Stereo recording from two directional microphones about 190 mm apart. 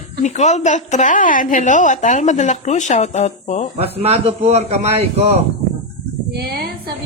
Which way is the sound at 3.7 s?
30° right (ahead or behind).